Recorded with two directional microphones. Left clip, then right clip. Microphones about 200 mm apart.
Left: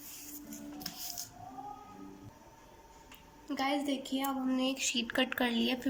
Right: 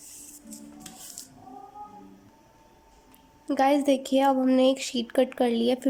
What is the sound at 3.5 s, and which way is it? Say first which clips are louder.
Speech: right 12 dB; 40° right (ahead or behind).